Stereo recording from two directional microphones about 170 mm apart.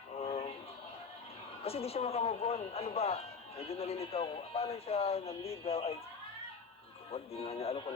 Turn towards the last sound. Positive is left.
turn(degrees=35)  # may be behind; listen again after turning